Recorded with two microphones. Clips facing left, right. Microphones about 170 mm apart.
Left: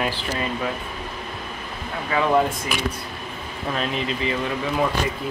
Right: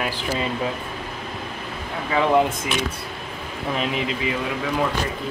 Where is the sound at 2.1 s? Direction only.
20° right (ahead or behind).